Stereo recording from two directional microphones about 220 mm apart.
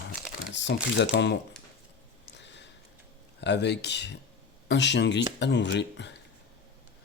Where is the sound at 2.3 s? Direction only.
55° left (ahead or behind).